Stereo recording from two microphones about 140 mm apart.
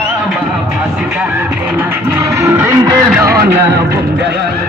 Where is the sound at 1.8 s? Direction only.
20° right (ahead or behind).